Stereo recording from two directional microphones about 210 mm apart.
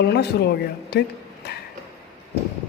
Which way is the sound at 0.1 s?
50° left (ahead or behind).